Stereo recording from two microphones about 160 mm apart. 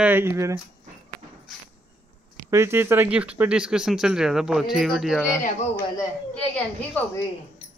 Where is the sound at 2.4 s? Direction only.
15° right (ahead or behind); by 5.2 s centre (ahead or behind).